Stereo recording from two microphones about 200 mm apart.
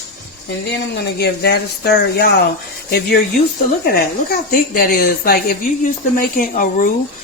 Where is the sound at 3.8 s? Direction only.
45° left (ahead or behind).